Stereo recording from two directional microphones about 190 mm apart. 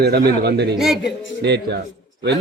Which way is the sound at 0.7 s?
Centre (ahead or behind).